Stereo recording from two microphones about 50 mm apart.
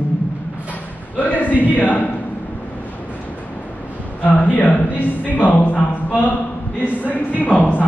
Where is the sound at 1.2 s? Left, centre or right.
Left.